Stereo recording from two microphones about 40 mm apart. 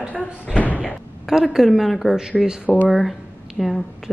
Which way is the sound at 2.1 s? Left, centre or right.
Centre.